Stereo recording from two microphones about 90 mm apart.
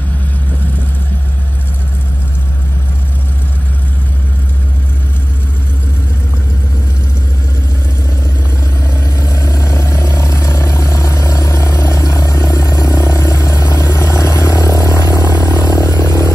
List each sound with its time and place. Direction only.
9.2 s vehicle: 35° left (ahead or behind)